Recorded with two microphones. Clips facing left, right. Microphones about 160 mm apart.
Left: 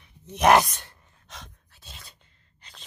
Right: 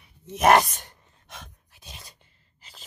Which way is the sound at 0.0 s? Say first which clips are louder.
Even; 5° right (ahead or behind).